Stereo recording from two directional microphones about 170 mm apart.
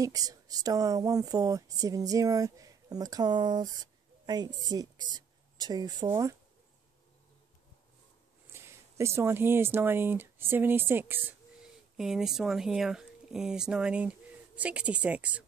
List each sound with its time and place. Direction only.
0.0 s speech: 20° right (ahead or behind)
8.5 s speech: 15° right (ahead or behind)